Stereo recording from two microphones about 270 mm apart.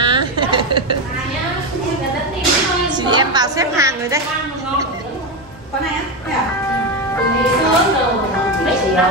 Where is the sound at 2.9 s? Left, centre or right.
Centre.